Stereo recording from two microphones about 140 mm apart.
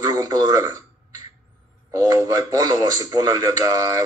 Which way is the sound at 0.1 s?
25° right (ahead or behind).